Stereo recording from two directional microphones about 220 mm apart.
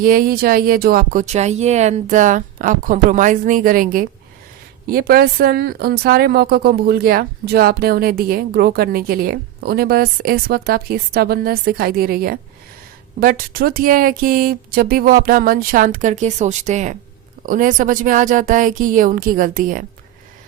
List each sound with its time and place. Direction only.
0.0 s speech: 40° right (ahead or behind)